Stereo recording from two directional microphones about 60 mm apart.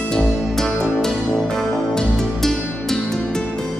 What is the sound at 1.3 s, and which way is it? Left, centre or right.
Music, centre.